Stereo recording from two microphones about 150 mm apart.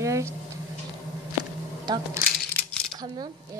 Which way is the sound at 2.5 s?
5° left (ahead or behind).